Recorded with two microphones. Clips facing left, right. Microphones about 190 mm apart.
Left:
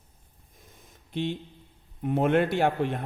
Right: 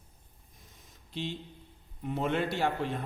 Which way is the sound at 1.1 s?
55° left (ahead or behind).